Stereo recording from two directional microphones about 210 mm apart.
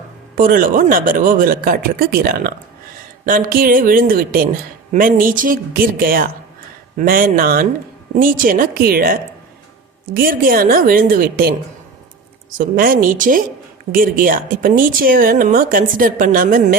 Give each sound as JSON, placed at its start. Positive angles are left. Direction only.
{"t": 0.3, "sound": "a woman's voice", "side_deg": -40}
{"t": 10.2, "sound": "a woman's voice", "side_deg": -40}